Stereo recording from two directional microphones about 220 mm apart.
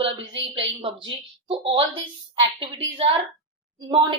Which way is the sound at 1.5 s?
25° right (ahead or behind).